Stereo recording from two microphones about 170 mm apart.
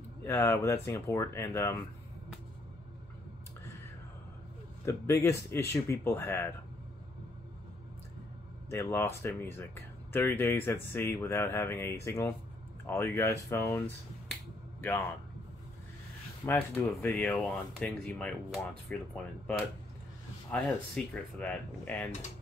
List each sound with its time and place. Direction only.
0.2 s speech: 15° left (ahead or behind)
4.8 s speech: 15° left (ahead or behind)
8.6 s speech: 15° left (ahead or behind)
16.4 s speech: 10° left (ahead or behind)
20.5 s speech: 5° left (ahead or behind)